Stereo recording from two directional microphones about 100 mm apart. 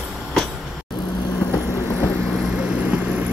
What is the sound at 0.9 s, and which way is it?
Vehicle, 45° left (ahead or behind).